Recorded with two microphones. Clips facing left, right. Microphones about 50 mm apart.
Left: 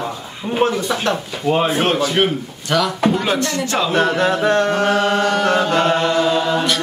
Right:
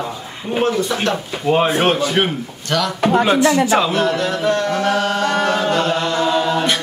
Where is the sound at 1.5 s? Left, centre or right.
Centre.